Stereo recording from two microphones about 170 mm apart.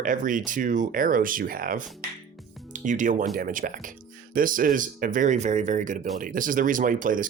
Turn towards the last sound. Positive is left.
turn(degrees=-50)  # may be behind; listen again after turning